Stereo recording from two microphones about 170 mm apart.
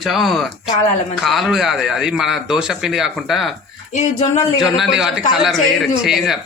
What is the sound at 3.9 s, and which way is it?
Speech, 40° left (ahead or behind).